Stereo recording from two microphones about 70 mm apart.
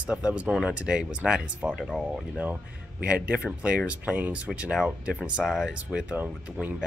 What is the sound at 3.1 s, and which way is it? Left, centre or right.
Speech, centre.